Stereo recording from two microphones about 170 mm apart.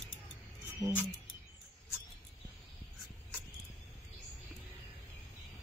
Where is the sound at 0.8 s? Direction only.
35° right (ahead or behind).